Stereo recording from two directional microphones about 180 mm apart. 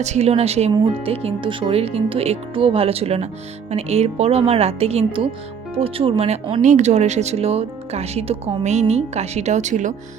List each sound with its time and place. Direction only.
0.0 s speech: 40° right (ahead or behind)